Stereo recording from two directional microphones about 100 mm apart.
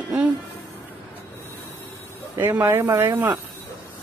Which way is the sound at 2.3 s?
20° right (ahead or behind).